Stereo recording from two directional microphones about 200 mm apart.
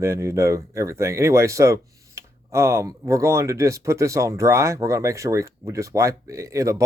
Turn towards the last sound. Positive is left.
turn(degrees=-15)  # may be behind; listen again after turning